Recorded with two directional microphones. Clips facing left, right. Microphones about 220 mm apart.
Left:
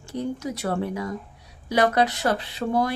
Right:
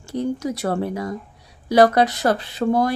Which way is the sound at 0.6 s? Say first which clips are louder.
Even; 40° right (ahead or behind).